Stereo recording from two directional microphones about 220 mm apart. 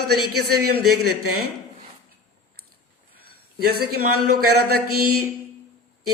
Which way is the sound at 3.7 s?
45° right (ahead or behind).